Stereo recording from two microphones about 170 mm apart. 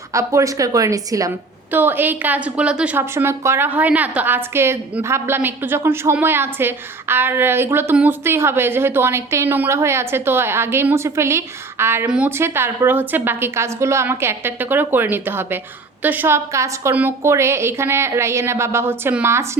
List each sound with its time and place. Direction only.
0.1 s a woman's voice: 20° right (ahead or behind)